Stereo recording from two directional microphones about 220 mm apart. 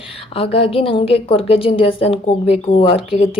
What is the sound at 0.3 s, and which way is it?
A woman's voice, 25° left (ahead or behind).